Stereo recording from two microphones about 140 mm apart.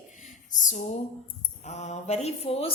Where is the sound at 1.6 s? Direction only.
55° left (ahead or behind).